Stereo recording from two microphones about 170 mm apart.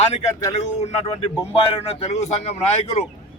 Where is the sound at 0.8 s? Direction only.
40° left (ahead or behind).